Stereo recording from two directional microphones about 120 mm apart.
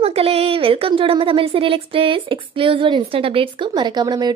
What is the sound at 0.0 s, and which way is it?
A woman's voice, 55° right (ahead or behind).